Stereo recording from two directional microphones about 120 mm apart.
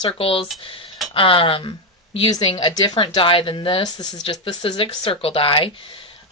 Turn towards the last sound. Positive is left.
turn(degrees=50)  # may be behind; listen again after turning